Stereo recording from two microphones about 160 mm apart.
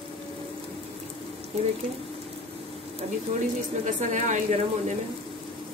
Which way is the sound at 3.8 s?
50° right (ahead or behind).